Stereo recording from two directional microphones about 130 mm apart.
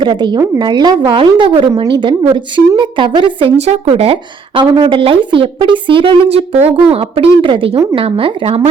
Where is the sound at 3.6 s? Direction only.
55° right (ahead or behind).